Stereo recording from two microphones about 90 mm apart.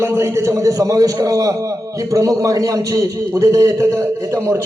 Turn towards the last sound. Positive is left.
turn(degrees=-30)  # may be behind; listen again after turning